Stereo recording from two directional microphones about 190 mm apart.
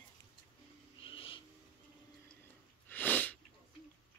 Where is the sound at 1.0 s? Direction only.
30° left (ahead or behind).